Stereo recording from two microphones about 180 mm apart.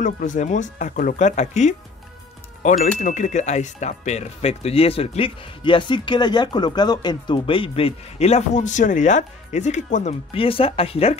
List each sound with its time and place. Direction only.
0.0 s speech: 45° left (ahead or behind)
10.3 s speech: 30° left (ahead or behind)